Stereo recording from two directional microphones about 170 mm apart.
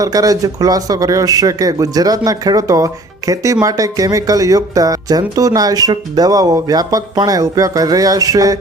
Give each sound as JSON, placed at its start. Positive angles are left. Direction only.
{"t": 0.0, "sound": "a man's voice", "side_deg": -20}